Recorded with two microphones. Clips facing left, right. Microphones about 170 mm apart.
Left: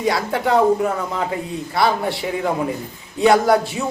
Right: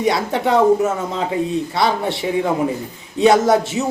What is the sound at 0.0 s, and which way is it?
A woman's voice, 25° right (ahead or behind).